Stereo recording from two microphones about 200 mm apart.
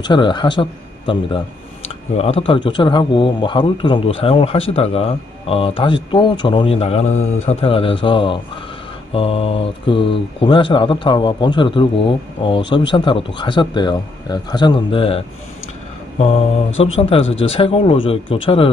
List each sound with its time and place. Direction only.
0.0 s a man's voice: 25° left (ahead or behind)
16.7 s a man's voice: 30° left (ahead or behind)